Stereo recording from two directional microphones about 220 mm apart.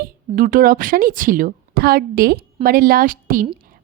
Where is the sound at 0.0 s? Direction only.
40° right (ahead or behind).